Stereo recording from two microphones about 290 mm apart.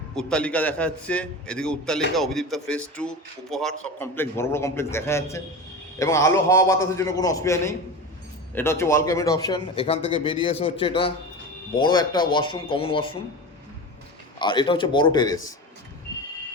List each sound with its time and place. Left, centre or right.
0.2 s a man's voice: centre
14.3 s a man's voice: centre